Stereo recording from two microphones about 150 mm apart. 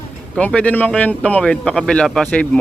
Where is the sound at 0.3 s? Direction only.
10° left (ahead or behind).